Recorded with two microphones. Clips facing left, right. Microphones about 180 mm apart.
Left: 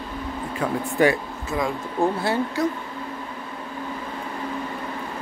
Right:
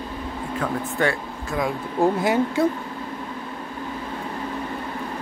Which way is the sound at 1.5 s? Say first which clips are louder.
Right 1 dB; centre (ahead or behind).